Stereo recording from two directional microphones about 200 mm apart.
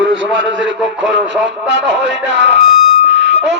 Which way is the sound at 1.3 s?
65° right (ahead or behind).